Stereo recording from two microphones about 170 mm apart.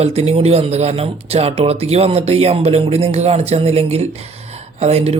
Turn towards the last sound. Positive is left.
turn(degrees=-40)  # may be behind; listen again after turning